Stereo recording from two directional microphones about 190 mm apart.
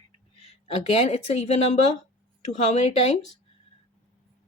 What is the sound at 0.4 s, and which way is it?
A woman's voice, 30° left (ahead or behind).